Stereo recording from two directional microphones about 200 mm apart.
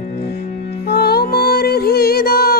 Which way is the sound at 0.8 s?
50° left (ahead or behind).